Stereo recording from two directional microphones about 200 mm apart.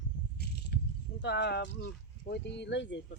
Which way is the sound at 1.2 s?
60° left (ahead or behind).